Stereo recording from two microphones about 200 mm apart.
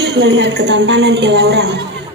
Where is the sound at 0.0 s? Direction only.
55° right (ahead or behind).